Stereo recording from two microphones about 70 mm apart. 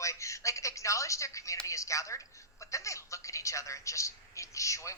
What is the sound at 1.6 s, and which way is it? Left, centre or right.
A man's voice, left.